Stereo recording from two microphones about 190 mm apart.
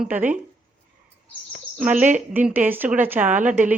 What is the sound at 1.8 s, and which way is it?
Speech, 5° right (ahead or behind).